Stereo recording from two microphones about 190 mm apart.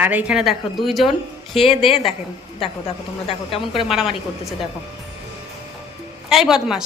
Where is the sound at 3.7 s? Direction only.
Centre (ahead or behind).